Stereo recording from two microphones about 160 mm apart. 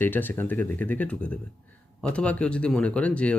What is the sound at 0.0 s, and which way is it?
Speech, 10° left (ahead or behind).